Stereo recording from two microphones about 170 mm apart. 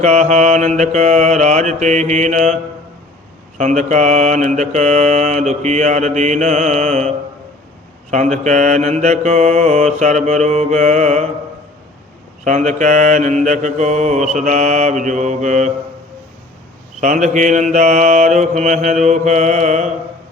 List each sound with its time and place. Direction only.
0.0 s mantra: 45° right (ahead or behind)
3.6 s mantra: 45° right (ahead or behind)
8.1 s mantra: 45° right (ahead or behind)
12.5 s mantra: 45° right (ahead or behind)
17.0 s mantra: 45° right (ahead or behind)